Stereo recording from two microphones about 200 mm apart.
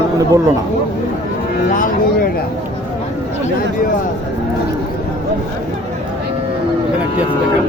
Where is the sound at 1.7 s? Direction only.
40° left (ahead or behind).